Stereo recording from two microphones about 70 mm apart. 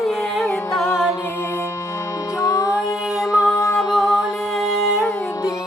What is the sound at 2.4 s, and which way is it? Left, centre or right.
Music, left.